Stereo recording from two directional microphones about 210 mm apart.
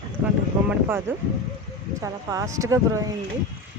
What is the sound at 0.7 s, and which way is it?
Speech, 10° right (ahead or behind).